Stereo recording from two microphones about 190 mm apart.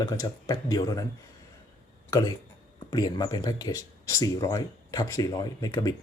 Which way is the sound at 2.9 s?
20° left (ahead or behind).